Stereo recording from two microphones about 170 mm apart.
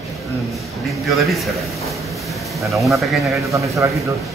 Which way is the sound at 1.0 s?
Centre (ahead or behind).